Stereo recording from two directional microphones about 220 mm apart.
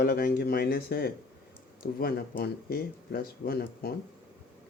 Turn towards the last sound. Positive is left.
turn(degrees=45)  # may be behind; listen again after turning